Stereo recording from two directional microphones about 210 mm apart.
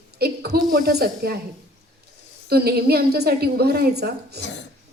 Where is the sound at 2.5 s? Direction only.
50° right (ahead or behind).